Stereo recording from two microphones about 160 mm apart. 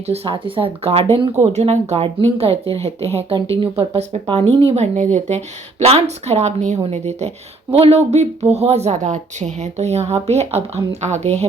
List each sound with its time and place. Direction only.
0.1 s a woman's voice: 35° right (ahead or behind)